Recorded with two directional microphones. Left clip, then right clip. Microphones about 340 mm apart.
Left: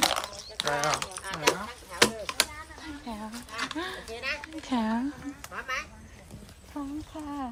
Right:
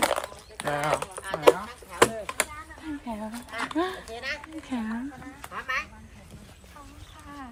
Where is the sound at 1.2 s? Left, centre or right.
Centre.